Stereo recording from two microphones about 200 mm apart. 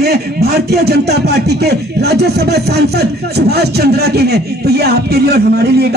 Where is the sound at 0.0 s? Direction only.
55° right (ahead or behind).